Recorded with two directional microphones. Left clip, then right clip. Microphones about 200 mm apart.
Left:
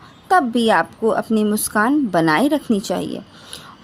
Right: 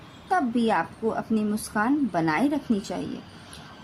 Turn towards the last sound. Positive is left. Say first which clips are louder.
# left 9 dB
turn(degrees=45)  # may be behind; listen again after turning